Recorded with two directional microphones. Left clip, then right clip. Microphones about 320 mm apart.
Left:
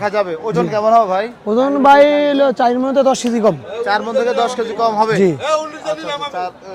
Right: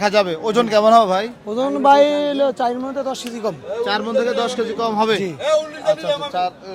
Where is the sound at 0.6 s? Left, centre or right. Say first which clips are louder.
Even; right.